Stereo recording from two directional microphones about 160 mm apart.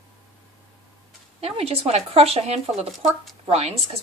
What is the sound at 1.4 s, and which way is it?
Speech, 40° right (ahead or behind).